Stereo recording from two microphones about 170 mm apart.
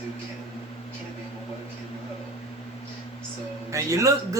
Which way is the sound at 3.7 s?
20° right (ahead or behind).